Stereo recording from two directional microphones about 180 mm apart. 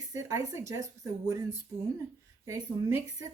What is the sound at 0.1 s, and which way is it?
A woman's voice, 15° right (ahead or behind).